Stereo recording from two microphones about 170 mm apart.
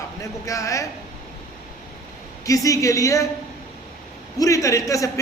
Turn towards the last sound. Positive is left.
turn(degrees=20)  # may be behind; listen again after turning